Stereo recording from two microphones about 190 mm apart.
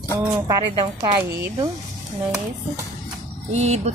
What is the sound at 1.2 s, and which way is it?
Speech, 15° right (ahead or behind).